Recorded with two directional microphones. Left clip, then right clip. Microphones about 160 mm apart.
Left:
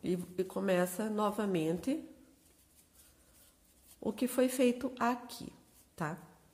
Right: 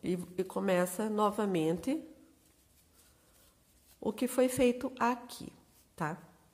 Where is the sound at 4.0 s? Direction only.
25° right (ahead or behind).